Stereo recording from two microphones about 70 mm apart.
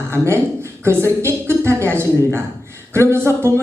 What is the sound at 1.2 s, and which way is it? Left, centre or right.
Speech, right.